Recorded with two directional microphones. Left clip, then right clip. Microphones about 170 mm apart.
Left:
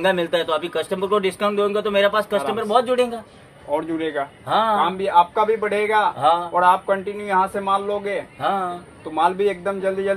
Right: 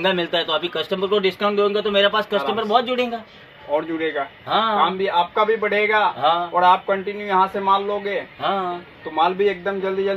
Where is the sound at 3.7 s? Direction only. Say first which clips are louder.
Right 1 dB; 30° left (ahead or behind).